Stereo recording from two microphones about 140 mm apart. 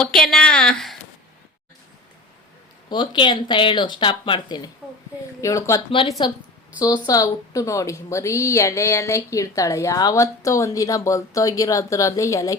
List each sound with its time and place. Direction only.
0.0 s a sound: 5° left (ahead or behind)
2.9 s speech: 35° left (ahead or behind)
5.9 s speech: 40° left (ahead or behind); by 12.5 s 20° left (ahead or behind)